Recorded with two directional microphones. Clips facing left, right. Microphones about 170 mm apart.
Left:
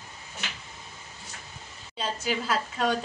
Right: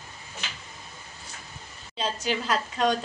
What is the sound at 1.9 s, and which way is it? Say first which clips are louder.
Speech: right 1 dB; 5° left (ahead or behind).